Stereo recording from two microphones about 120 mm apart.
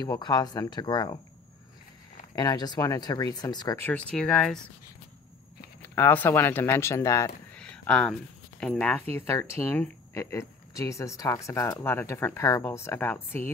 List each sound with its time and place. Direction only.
0.0 s speech: 35° left (ahead or behind)
2.3 s speech: 35° left (ahead or behind)
3.7 s speech: 15° left (ahead or behind)
4.1 s speech: 5° left (ahead or behind)
5.8 s speech: 15° left (ahead or behind)
7.5 s speech: 10° left (ahead or behind)